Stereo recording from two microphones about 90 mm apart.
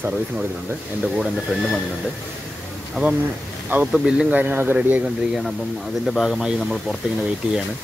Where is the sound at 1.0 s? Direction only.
5° right (ahead or behind).